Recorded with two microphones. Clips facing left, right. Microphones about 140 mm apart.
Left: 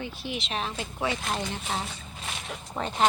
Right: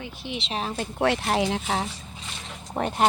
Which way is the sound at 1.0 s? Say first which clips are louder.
Right 7 dB; 75° right (ahead or behind).